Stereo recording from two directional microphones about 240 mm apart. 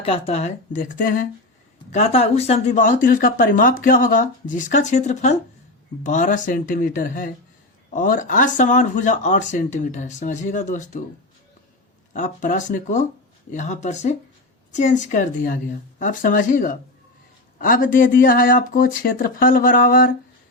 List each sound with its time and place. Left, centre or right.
0.0 s speech: left
12.1 s speech: left